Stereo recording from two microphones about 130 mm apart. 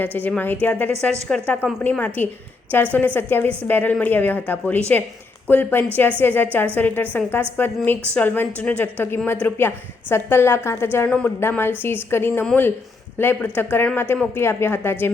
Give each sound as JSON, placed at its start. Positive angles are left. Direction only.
{"t": 0.0, "sound": "a woman's voice", "side_deg": 10}